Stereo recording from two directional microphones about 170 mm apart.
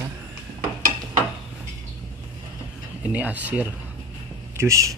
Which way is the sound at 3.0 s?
10° right (ahead or behind).